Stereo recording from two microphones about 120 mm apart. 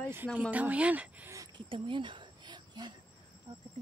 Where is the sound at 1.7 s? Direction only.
45° right (ahead or behind).